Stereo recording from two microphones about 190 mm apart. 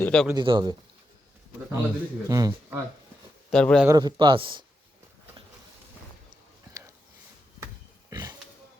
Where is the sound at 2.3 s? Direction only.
15° right (ahead or behind).